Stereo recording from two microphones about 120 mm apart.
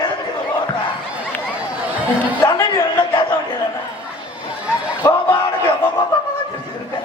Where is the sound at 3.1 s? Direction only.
45° left (ahead or behind).